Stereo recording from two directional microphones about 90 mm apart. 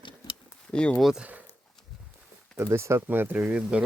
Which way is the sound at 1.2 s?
15° right (ahead or behind).